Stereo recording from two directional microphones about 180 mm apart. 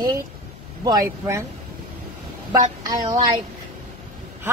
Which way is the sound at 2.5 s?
20° right (ahead or behind).